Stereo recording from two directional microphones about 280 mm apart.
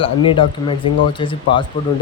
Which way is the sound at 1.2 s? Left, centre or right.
Centre.